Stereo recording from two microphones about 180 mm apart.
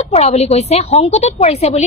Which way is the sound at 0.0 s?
35° left (ahead or behind).